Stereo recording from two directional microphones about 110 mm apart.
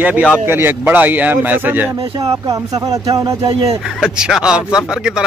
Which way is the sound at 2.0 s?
40° right (ahead or behind).